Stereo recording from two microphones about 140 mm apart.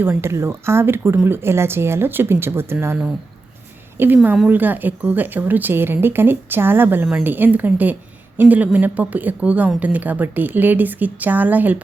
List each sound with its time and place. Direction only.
0.0 s a woman's voice: 15° right (ahead or behind)